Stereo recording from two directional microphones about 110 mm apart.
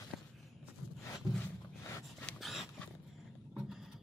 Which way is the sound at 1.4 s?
25° left (ahead or behind).